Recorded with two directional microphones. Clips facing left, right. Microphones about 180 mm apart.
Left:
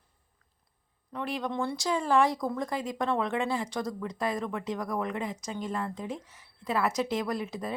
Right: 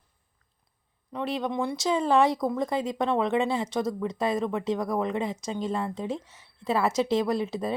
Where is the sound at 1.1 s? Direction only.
25° right (ahead or behind).